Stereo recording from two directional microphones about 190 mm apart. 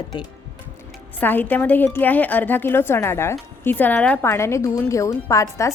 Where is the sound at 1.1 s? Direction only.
10° left (ahead or behind).